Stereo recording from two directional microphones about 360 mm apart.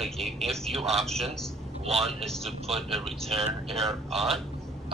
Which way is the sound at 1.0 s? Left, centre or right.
Centre.